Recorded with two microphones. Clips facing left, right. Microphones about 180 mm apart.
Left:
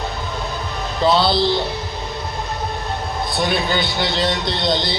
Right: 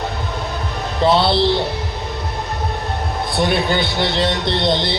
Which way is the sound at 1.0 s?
25° right (ahead or behind).